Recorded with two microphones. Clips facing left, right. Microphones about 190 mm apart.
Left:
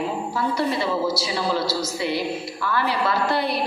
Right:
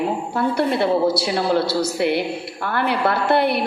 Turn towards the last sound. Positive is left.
turn(degrees=-60)  # may be behind; listen again after turning